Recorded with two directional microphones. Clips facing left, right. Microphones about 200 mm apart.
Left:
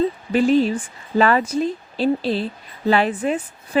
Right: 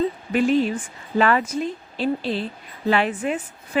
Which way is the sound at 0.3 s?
35° left (ahead or behind).